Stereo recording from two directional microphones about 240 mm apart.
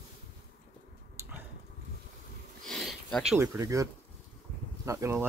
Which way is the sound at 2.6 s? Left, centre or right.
Centre.